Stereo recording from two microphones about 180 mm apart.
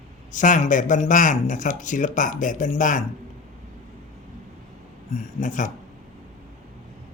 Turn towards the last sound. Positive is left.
turn(degrees=45)  # may be behind; listen again after turning